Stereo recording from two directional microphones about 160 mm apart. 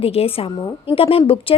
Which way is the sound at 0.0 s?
35° left (ahead or behind).